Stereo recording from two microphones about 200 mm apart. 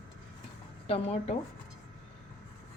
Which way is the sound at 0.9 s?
30° left (ahead or behind).